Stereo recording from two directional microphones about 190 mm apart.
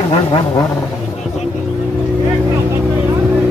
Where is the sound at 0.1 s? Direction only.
25° left (ahead or behind).